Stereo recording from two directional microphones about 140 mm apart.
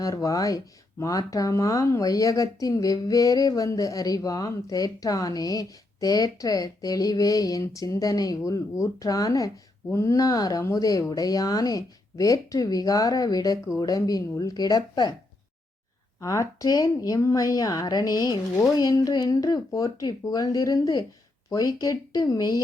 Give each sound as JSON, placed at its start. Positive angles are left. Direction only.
{"t": 0.0, "sound": "speech", "side_deg": 25}
{"t": 16.2, "sound": "speech", "side_deg": 20}